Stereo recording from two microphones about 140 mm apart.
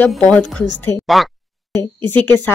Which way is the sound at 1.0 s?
Centre (ahead or behind).